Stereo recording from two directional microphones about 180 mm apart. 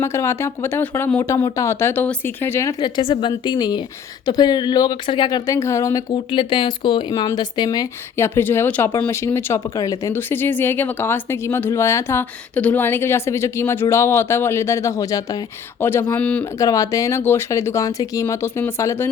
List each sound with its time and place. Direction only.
0.0 s speech: 15° left (ahead or behind)